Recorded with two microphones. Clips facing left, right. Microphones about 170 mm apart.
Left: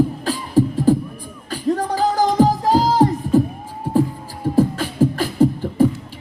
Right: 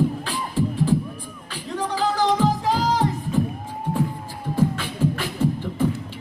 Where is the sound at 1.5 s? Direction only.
40° left (ahead or behind).